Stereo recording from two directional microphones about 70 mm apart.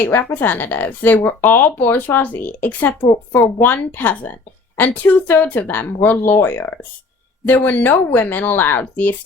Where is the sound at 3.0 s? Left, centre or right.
Left.